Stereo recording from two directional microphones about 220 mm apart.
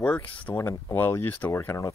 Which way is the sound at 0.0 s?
5° left (ahead or behind).